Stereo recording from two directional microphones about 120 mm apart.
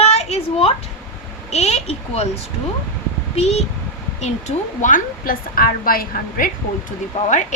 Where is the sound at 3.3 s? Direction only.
65° left (ahead or behind).